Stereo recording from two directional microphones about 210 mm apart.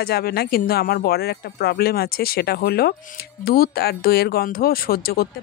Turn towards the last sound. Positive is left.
turn(degrees=45)  # may be behind; listen again after turning